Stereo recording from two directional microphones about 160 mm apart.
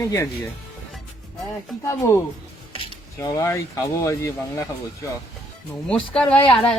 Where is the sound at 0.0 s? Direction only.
20° left (ahead or behind).